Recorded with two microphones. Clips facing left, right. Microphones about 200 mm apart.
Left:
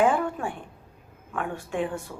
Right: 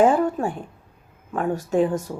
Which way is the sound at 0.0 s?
40° right (ahead or behind).